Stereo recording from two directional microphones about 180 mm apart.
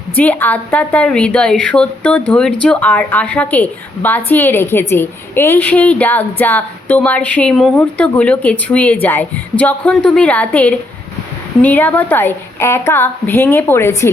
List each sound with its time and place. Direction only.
0.2 s a woman's voice: 10° left (ahead or behind)